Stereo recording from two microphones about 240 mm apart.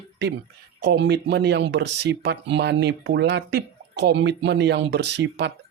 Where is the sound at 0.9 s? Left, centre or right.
Right.